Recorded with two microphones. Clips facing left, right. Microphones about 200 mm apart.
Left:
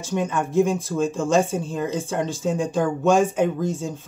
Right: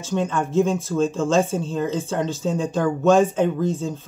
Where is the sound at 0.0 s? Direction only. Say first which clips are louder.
Right 1 dB; 15° left (ahead or behind).